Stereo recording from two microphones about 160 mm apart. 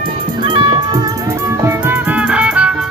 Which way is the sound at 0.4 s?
30° right (ahead or behind).